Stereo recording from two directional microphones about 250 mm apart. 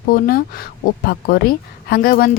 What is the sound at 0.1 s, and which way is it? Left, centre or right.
A woman's voice, left.